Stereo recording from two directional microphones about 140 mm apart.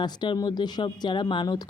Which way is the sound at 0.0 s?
30° left (ahead or behind).